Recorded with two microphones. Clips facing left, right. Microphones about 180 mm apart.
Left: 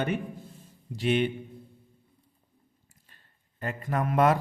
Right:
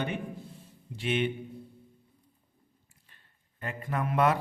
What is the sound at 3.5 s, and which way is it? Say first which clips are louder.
Speech: left 3 dB; 40° left (ahead or behind).